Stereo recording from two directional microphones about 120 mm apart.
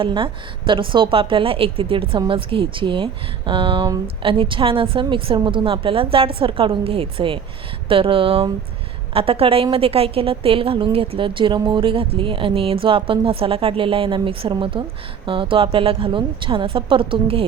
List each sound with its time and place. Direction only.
0.0 s a woman's voice: 45° right (ahead or behind)